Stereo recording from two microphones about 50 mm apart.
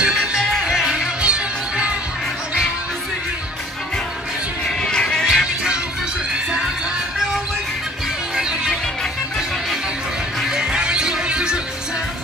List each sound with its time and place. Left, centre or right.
0.0 s music: centre
4.6 s music: centre
5.2 s music: centre
8.4 s music: centre
10.4 s music: centre